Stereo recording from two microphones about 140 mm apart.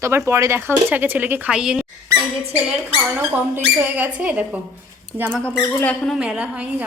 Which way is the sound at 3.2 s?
15° right (ahead or behind).